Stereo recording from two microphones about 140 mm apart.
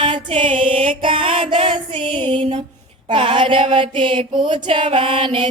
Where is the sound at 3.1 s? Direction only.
40° right (ahead or behind).